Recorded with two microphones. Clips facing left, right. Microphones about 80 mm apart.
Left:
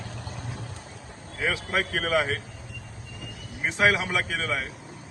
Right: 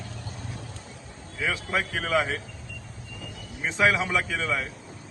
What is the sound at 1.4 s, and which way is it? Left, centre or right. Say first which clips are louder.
Speech: left 1 dB; left.